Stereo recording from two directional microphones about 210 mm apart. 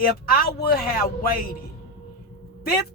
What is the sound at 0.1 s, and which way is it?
Speech, 45° left (ahead or behind).